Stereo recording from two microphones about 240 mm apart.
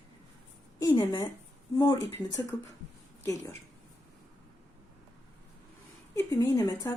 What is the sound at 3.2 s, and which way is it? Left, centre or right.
Speech, centre.